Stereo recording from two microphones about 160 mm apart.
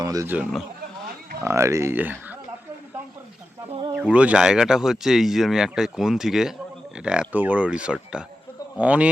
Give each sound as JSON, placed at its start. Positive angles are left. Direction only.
{"t": 0.0, "sound": "speech", "side_deg": -20}
{"t": 1.4, "sound": "speech", "side_deg": -15}
{"t": 3.7, "sound": "speech", "side_deg": -30}
{"t": 3.9, "sound": "speech", "side_deg": -5}